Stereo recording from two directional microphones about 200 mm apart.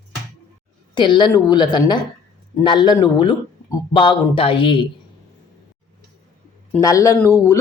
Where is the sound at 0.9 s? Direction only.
25° left (ahead or behind).